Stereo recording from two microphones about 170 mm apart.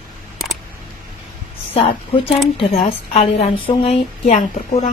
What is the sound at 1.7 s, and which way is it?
A woman's voice, 35° left (ahead or behind).